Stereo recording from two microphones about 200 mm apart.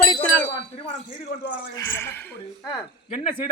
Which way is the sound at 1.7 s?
10° left (ahead or behind).